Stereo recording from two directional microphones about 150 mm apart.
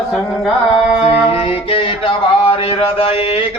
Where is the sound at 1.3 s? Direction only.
40° left (ahead or behind).